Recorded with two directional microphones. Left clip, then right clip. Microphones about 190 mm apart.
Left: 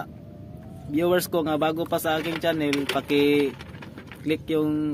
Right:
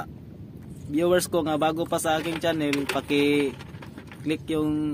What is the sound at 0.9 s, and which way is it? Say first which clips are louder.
Speech: even; 15° left (ahead or behind).